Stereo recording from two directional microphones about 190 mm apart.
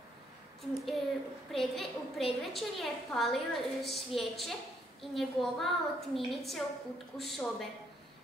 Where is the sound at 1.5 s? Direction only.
Centre (ahead or behind).